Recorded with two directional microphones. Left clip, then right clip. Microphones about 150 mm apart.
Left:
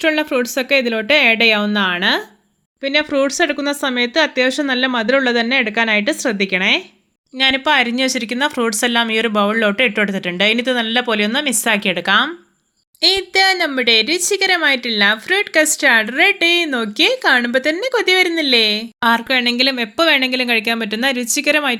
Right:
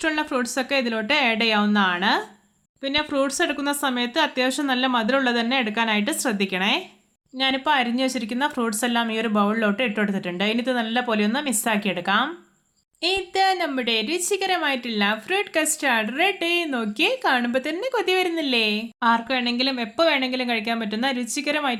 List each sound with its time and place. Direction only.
0.0 s a woman's voice: 20° left (ahead or behind)
18.9 s a woman's voice: 25° left (ahead or behind)